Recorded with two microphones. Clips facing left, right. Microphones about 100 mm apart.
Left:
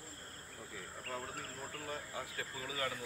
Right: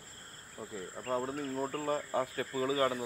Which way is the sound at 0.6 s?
35° right (ahead or behind).